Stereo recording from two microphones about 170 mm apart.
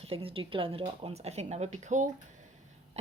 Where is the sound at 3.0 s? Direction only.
40° right (ahead or behind).